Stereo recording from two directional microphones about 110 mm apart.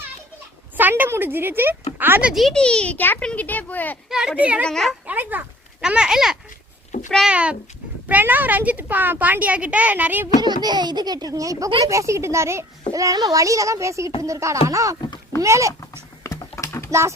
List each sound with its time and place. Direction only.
0.8 s a woman's voice: 15° right (ahead or behind)
2.3 s a child's voice: 5° left (ahead or behind)
4.1 s a woman's voice: 5° right (ahead or behind)
4.6 s speech: 5° left (ahead or behind)
5.0 s a woman's voice: 15° right (ahead or behind)
10.4 s a child's voice: 40° right (ahead or behind)
15.8 s typing: 30° left (ahead or behind)